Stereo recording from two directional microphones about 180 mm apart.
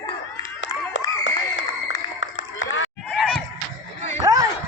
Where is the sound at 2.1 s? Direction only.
90° left.